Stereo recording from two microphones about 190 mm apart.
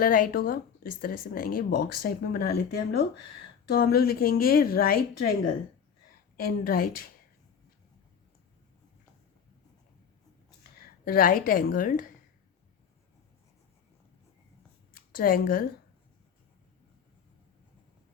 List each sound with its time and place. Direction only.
0.0 s speech: 50° left (ahead or behind)
6.4 s speech: 50° left (ahead or behind)
11.0 s speech: 50° left (ahead or behind)
15.1 s speech: 50° left (ahead or behind)